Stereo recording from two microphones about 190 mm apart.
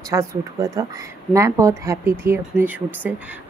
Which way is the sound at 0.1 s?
15° right (ahead or behind).